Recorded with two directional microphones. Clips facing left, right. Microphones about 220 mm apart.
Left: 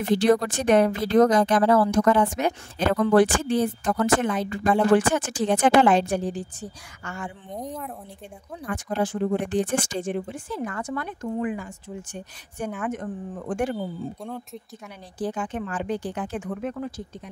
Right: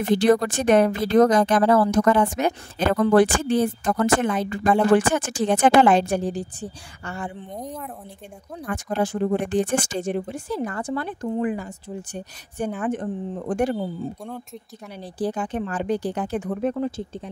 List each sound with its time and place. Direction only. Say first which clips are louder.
0.2 s a woman's voice: right 2 dB; 50° right (ahead or behind)
6.6 s speech: right 3 dB; 35° right (ahead or behind)
7.5 s speech: even; centre (ahead or behind)
8.7 s speech: right 2 dB; 45° right (ahead or behind)
15.0 s speech: right 3 dB; 35° right (ahead or behind)